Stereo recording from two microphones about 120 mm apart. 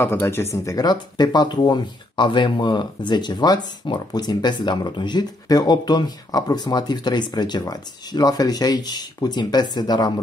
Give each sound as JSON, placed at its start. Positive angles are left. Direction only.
{"t": 0.0, "sound": "speech", "side_deg": 20}